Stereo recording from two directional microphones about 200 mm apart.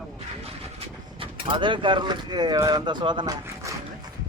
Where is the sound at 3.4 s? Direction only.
15° right (ahead or behind).